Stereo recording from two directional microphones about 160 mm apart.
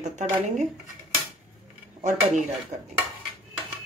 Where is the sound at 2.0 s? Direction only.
50° right (ahead or behind).